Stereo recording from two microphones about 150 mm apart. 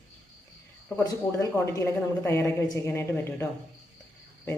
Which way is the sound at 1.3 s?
20° left (ahead or behind).